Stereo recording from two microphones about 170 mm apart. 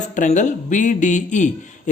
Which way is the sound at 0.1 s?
45° left (ahead or behind).